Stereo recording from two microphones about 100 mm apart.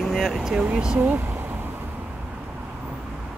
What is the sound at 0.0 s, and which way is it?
Speech, centre (ahead or behind).